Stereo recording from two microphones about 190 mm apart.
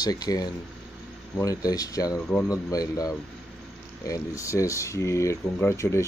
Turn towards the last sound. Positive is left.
turn(degrees=15)  # may be behind; listen again after turning